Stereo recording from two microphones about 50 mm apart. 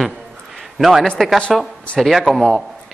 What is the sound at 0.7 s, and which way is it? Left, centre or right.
A man's voice, centre.